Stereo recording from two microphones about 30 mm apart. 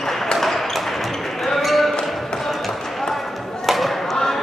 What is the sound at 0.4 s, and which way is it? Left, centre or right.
Basketball bounce, centre.